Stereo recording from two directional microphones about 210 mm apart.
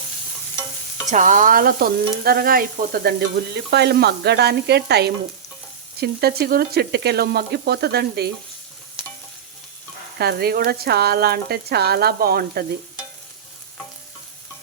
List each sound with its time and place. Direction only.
1.1 s stir: 35° right (ahead or behind)
10.2 s stir: 50° right (ahead or behind)